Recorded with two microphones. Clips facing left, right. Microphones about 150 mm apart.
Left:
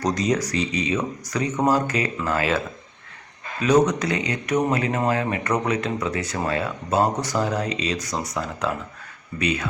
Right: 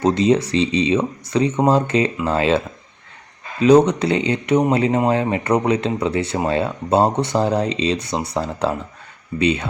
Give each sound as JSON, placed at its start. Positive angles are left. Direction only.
{"t": 0.0, "sound": "speech", "side_deg": -25}
{"t": 3.6, "sound": "speech", "side_deg": -30}